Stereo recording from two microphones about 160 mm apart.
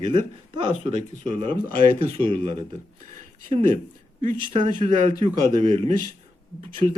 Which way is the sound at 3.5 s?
35° right (ahead or behind).